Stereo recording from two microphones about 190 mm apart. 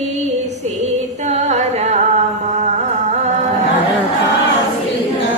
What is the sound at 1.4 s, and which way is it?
Music, 35° right (ahead or behind).